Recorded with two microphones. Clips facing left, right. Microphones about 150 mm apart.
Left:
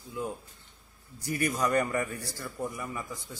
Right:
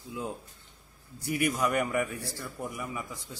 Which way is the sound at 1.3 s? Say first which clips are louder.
Even; 10° right (ahead or behind).